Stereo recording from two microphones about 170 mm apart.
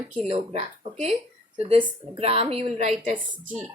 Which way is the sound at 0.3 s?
35° right (ahead or behind).